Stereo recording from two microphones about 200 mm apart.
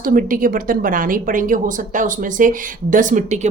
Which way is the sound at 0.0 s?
45° right (ahead or behind).